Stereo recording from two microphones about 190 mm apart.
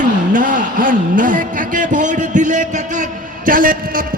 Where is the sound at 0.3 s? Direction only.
45° right (ahead or behind).